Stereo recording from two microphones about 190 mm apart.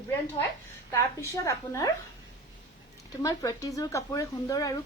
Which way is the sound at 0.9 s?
15° left (ahead or behind).